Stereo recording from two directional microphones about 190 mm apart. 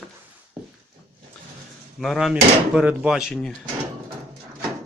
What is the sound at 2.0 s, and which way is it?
A man's voice, centre (ahead or behind).